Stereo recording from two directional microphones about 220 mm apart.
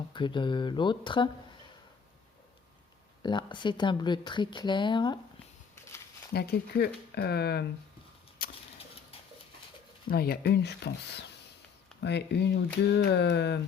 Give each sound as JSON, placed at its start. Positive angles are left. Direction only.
{"t": 0.1, "sound": "speech", "side_deg": 20}
{"t": 3.2, "sound": "speech", "side_deg": 20}
{"t": 6.3, "sound": "speech", "side_deg": 45}
{"t": 8.4, "sound": "a sound", "side_deg": 40}
{"t": 10.1, "sound": "speech", "side_deg": 45}
{"t": 11.9, "sound": "speech", "side_deg": 50}